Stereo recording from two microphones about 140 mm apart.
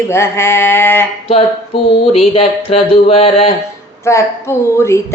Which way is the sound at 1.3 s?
45° left (ahead or behind).